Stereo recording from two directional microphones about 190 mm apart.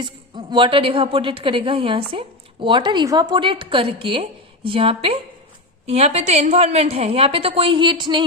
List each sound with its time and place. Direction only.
0.0 s a woman's voice: 25° right (ahead or behind)